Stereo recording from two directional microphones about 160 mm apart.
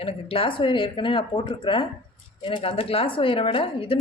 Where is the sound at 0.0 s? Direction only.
35° left (ahead or behind).